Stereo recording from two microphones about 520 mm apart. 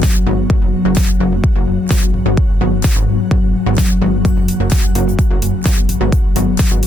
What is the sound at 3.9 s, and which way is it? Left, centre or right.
Music, centre.